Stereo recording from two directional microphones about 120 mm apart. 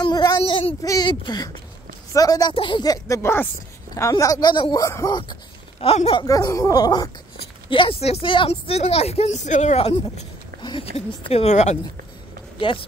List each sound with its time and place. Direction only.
0.0 s child singing: 35° left (ahead or behind)
0.4 s child singing: 50° left (ahead or behind)
0.8 s speech: 35° left (ahead or behind)
2.5 s speech: 45° left (ahead or behind)
4.8 s speech: 30° left (ahead or behind)
5.8 s speech: 55° left (ahead or behind)
6.2 s speech: 30° left (ahead or behind)
7.7 s a woman's voice: 50° left (ahead or behind)
10.6 s speech: 45° left (ahead or behind); by 11.8 s 65° left (ahead or behind)
12.5 s speech: 45° left (ahead or behind)